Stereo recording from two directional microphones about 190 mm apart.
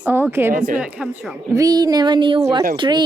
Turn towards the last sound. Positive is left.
turn(degrees=-25)  # may be behind; listen again after turning